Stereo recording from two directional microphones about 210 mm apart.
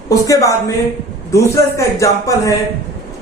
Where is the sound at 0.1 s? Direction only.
15° left (ahead or behind).